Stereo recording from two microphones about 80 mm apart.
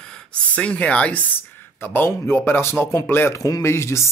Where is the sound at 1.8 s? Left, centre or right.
Left.